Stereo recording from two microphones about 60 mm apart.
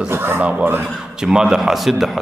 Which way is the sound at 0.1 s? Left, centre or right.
Right.